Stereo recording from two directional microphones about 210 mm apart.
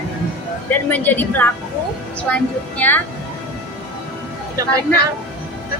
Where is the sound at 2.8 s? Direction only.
5° left (ahead or behind).